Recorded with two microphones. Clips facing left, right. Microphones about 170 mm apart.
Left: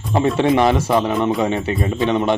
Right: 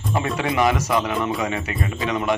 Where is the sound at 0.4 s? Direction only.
30° left (ahead or behind).